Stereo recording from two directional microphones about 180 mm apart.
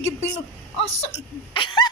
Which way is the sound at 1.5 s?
25° left (ahead or behind).